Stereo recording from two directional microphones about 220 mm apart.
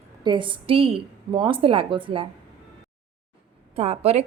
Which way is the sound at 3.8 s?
30° right (ahead or behind).